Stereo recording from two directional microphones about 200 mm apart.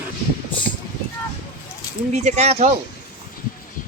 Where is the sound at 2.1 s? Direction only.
35° right (ahead or behind).